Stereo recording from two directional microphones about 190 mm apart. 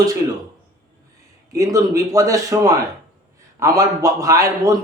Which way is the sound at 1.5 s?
15° right (ahead or behind).